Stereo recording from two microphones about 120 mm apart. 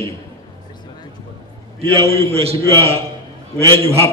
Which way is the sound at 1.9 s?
55° right (ahead or behind).